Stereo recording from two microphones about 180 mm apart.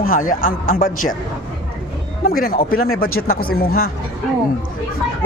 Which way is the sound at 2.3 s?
55° left (ahead or behind).